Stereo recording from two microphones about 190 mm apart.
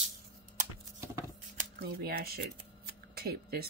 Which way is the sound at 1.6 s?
50° right (ahead or behind).